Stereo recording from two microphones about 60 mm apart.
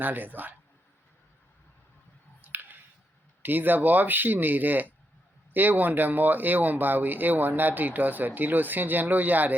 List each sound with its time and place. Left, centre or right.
0.0 s speech: right
2.4 s a sound: right
3.4 s speech: right